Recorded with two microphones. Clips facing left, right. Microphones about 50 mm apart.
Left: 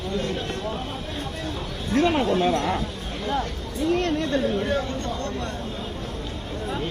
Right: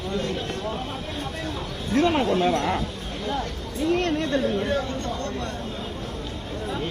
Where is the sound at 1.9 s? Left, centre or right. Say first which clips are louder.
Even; right.